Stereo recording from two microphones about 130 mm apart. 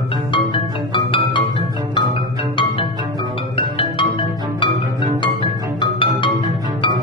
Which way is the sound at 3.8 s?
40° left (ahead or behind).